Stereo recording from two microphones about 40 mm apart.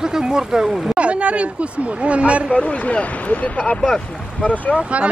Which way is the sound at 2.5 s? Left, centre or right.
Left.